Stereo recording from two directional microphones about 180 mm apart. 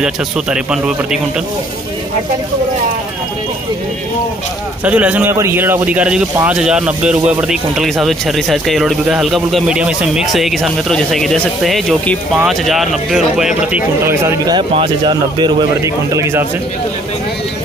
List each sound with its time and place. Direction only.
0.0 s speech: 5° right (ahead or behind)
4.8 s a man's voice: 10° right (ahead or behind)